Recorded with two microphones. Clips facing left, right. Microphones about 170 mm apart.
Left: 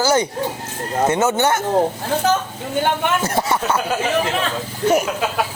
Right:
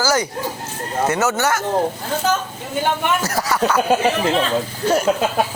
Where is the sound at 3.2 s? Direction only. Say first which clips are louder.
Even; 25° left (ahead or behind).